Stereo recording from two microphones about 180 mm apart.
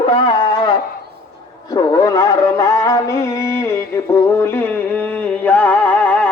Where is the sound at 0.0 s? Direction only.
30° left (ahead or behind).